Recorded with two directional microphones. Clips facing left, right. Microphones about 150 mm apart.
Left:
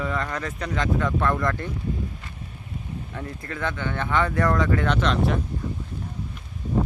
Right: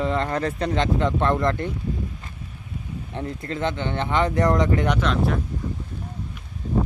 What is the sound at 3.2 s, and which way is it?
Speech, 25° right (ahead or behind).